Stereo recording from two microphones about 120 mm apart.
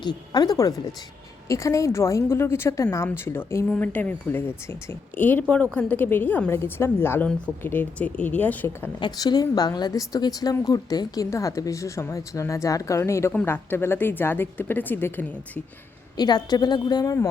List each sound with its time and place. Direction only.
0.0 s a woman's voice: 35° left (ahead or behind); by 8.9 s 15° left (ahead or behind)
9.0 s a woman's voice: 35° left (ahead or behind); by 15.6 s 15° left (ahead or behind)
16.1 s a woman's voice: 35° left (ahead or behind)